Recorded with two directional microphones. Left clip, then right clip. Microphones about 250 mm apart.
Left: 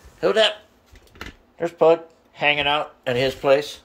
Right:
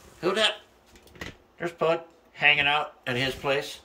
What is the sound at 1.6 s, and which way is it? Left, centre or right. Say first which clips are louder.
Speech: left 9 dB; left.